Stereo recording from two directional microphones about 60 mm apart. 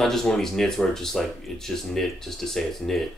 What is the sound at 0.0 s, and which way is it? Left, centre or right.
Speech, centre.